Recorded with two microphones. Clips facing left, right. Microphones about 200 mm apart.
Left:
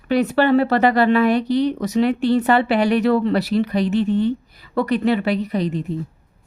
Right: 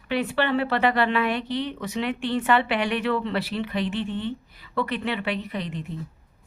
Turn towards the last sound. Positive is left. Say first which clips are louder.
# left 9 dB
turn(degrees=40)  # may be behind; listen again after turning